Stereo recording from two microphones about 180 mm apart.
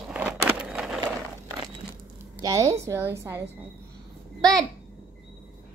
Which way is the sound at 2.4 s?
20° right (ahead or behind).